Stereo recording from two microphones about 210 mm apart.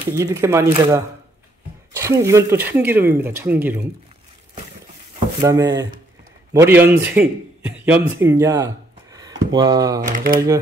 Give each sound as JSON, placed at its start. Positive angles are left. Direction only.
{"t": 0.1, "sound": "speech", "side_deg": -15}
{"t": 5.4, "sound": "speech", "side_deg": -15}
{"t": 8.2, "sound": "a sound", "side_deg": -10}
{"t": 9.5, "sound": "speech", "side_deg": -20}
{"t": 10.0, "sound": "speech", "side_deg": -40}